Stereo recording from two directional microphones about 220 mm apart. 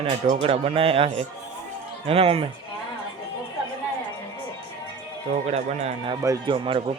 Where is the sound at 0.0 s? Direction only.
25° right (ahead or behind).